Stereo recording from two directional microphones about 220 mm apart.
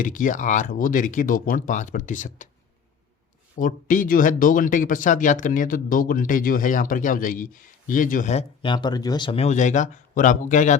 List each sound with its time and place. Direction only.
0.0 s speech: 35° left (ahead or behind)
3.6 s speech: 35° left (ahead or behind)